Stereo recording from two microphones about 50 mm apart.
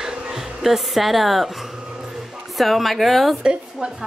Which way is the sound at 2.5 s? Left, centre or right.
Centre.